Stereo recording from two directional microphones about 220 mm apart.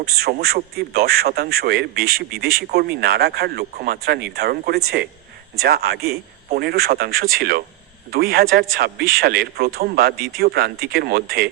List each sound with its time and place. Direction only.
0.0 s a man's voice: 45° right (ahead or behind)